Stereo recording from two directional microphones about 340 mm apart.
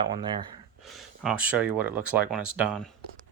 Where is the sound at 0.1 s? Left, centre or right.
Centre.